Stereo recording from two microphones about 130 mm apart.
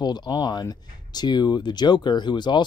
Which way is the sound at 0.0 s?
35° left (ahead or behind).